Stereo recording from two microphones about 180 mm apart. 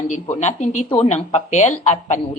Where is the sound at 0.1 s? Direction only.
40° left (ahead or behind).